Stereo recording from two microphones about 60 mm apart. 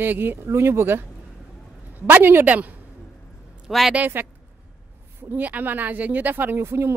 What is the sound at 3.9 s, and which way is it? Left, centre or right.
Speech, right.